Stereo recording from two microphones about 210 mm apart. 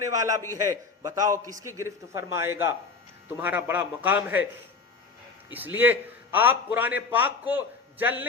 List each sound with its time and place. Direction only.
0.1 s a man's voice: 15° right (ahead or behind)
5.5 s a man's voice: 10° right (ahead or behind)